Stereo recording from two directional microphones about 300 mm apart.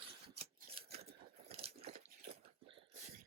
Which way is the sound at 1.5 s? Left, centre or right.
Centre.